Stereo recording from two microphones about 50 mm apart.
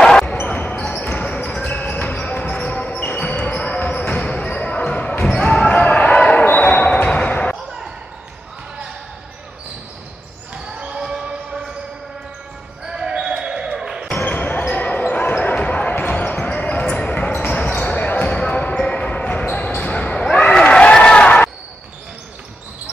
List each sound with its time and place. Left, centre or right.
0.0 s basketball bounce: centre
0.5 s basketball bounce: left
1.7 s basketball bounce: left
10.5 s basketball bounce: centre
12.8 s basketball bounce: centre
14.2 s basketball bounce: left